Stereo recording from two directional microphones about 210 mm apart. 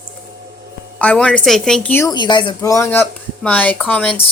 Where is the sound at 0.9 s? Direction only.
5° left (ahead or behind).